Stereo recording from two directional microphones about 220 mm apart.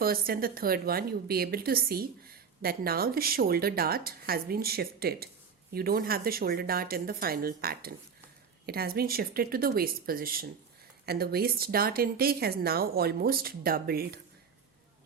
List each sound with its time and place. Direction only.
0.0 s a woman's voice: 40° right (ahead or behind)